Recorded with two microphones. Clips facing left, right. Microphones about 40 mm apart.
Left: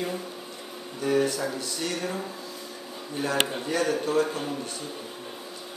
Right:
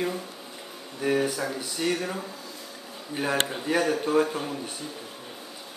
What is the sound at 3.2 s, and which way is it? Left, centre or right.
Speech, right.